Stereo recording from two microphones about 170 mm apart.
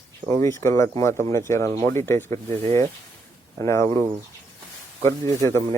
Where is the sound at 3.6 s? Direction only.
15° left (ahead or behind).